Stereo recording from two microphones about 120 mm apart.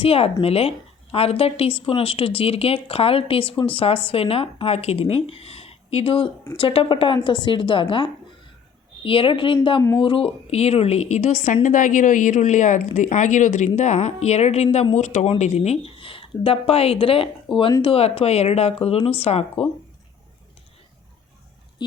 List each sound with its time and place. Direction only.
0.0 s speech: 50° left (ahead or behind); by 13.7 s 90° left
13.7 s speech: 70° left (ahead or behind)
14.9 s a woman's voice: 75° left (ahead or behind); by 17.2 s 50° left (ahead or behind)
17.5 s speech: centre (ahead or behind)
17.8 s speech: 55° left (ahead or behind)
21.8 s speech: 40° left (ahead or behind)